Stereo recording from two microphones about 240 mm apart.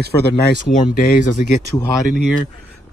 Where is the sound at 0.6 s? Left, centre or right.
Left.